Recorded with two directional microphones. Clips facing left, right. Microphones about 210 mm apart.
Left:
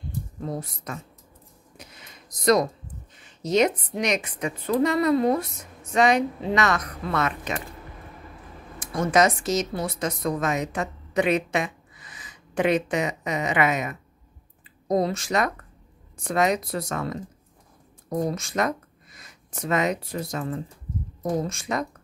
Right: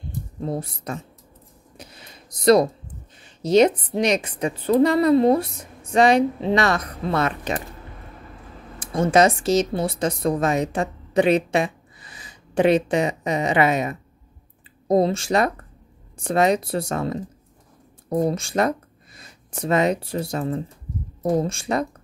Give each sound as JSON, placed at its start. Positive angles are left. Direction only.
{"t": 0.4, "sound": "a woman's voice", "side_deg": -30}
{"t": 1.8, "sound": "a sound", "side_deg": -30}
{"t": 3.2, "sound": "a woman's voice", "side_deg": -30}
{"t": 8.7, "sound": "speech", "side_deg": -30}